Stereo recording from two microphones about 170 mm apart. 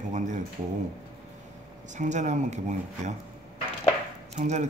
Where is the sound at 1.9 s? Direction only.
45° right (ahead or behind).